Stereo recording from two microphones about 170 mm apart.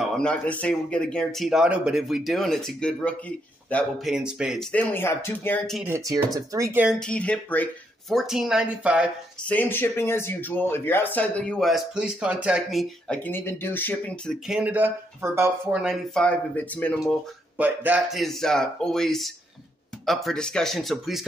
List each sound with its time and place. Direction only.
0.0 s speech: 5° left (ahead or behind)
4.1 s speech: 5° right (ahead or behind)
4.7 s speech: 15° left (ahead or behind)
5.9 s speech: 15° right (ahead or behind)
7.0 s speech: 5° left (ahead or behind)
8.1 s speech: centre (ahead or behind)
9.5 s speech: 10° left (ahead or behind); by 12.8 s 5° right (ahead or behind)
13.1 s speech: 10° left (ahead or behind)
14.5 s speech: 10° right (ahead or behind); by 17.0 s 10° left (ahead or behind)
17.6 s speech: 10° right (ahead or behind)